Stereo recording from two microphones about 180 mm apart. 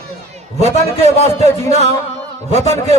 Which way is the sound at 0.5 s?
35° right (ahead or behind).